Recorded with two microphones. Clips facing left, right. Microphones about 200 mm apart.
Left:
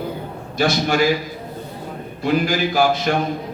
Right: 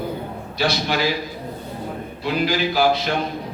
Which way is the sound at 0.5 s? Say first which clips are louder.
Left 4 dB; 50° left (ahead or behind).